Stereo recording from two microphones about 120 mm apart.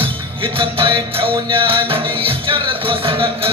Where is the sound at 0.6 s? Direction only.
45° right (ahead or behind).